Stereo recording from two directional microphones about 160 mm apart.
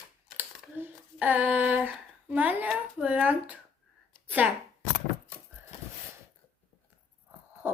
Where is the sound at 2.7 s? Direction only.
10° right (ahead or behind).